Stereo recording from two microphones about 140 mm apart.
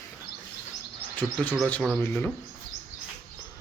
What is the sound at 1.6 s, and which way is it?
Speech, 10° left (ahead or behind).